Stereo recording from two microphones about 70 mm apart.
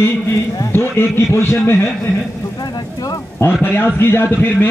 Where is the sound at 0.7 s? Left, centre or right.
Left.